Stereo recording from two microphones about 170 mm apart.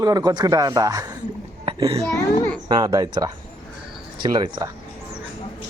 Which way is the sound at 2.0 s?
15° left (ahead or behind).